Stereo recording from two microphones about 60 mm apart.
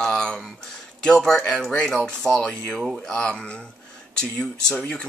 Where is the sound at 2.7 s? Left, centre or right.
Centre.